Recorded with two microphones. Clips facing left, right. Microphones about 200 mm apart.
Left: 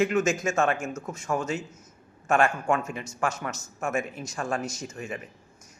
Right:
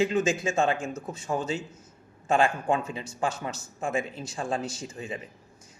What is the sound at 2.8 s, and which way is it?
Speech, 35° right (ahead or behind).